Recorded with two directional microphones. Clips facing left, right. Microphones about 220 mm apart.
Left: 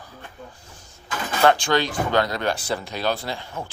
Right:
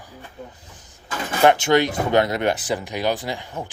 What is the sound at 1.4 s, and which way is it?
Speech, 20° right (ahead or behind).